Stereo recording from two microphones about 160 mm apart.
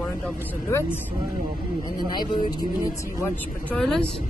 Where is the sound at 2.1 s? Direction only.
25° left (ahead or behind).